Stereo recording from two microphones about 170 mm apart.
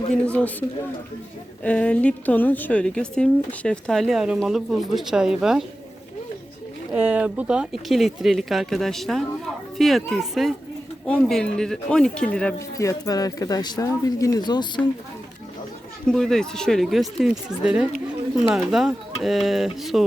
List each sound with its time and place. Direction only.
0.3 s a man's voice: 10° left (ahead or behind)
1.6 s a woman's voice: 5° left (ahead or behind)
6.9 s a woman's voice: 10° right (ahead or behind)
12.5 s speech: 20° left (ahead or behind)
16.0 s a woman's voice: centre (ahead or behind)